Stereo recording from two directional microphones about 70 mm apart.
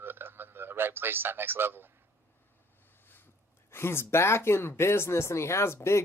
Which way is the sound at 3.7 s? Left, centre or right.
Left.